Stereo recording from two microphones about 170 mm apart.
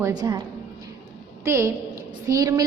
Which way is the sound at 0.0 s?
20° right (ahead or behind).